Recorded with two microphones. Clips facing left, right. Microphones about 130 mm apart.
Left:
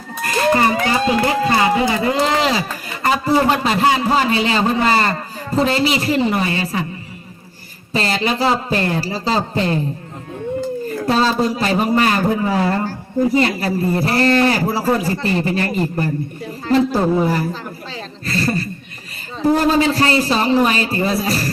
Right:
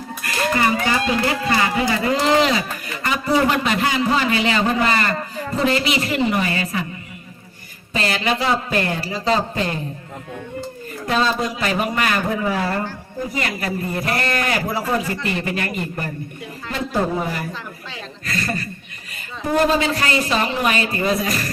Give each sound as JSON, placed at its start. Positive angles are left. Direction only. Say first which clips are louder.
{"t": 0.2, "sound": "a man's voice", "louder": "left 5 dB", "side_deg": 30}
{"t": 7.9, "sound": "a man's voice", "louder": "left 2 dB", "side_deg": 35}
{"t": 10.8, "sound": "a man's voice", "louder": "left 2 dB", "side_deg": 35}